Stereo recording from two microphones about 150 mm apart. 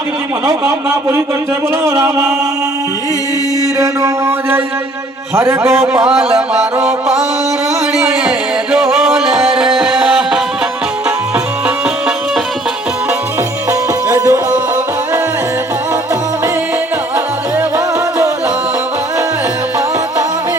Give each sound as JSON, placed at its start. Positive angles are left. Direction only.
{"t": 0.4, "sound": "a man's voice", "side_deg": -20}
{"t": 3.8, "sound": "mantra", "side_deg": -20}
{"t": 6.1, "sound": "a man's voice", "side_deg": -20}
{"t": 8.7, "sound": "music", "side_deg": 0}
{"t": 13.7, "sound": "music", "side_deg": -20}